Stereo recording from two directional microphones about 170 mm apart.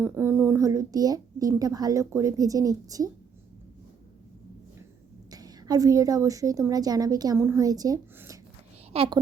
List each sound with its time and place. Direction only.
0.0 s a child's voice: 15° right (ahead or behind)
5.3 s a child's voice: 20° right (ahead or behind)
8.9 s a child's voice: 35° right (ahead or behind)